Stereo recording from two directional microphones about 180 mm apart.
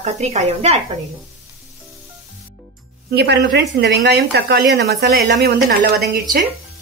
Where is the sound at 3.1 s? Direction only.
65° right (ahead or behind).